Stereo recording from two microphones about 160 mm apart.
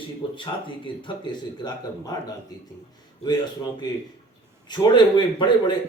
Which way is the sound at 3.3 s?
25° left (ahead or behind).